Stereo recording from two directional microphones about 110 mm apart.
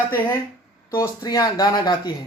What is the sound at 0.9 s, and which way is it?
Speech, 35° left (ahead or behind).